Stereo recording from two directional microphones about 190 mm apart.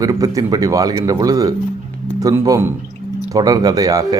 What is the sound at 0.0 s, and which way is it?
Speech, 20° right (ahead or behind).